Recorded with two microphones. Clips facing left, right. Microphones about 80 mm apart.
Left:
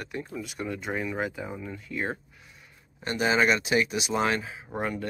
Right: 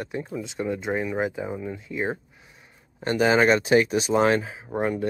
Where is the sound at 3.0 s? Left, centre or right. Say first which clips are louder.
Right 5 dB; right.